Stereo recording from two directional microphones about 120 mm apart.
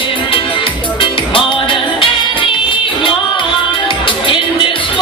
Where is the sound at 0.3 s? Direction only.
45° left (ahead or behind).